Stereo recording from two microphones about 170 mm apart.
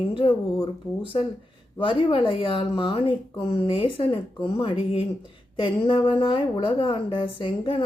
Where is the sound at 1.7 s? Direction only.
30° left (ahead or behind).